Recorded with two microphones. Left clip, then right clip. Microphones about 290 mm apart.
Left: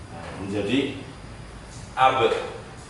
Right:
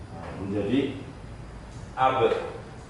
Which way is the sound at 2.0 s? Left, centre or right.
Centre.